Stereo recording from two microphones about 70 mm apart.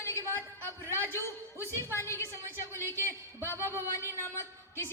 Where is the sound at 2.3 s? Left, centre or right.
Right.